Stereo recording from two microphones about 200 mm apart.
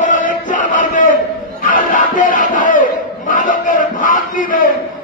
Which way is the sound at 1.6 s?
40° left (ahead or behind).